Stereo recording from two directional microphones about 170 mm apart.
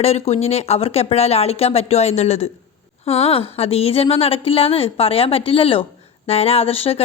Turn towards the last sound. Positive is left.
turn(degrees=35)  # may be behind; listen again after turning